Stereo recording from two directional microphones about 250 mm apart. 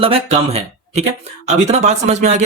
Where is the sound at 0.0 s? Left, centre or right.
Right.